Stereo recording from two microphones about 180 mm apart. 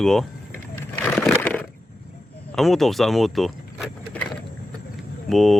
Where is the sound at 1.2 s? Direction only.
10° left (ahead or behind).